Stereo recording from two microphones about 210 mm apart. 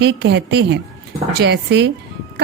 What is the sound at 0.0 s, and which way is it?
A woman's voice, 50° right (ahead or behind).